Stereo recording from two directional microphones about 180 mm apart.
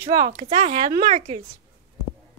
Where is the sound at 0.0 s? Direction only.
40° right (ahead or behind).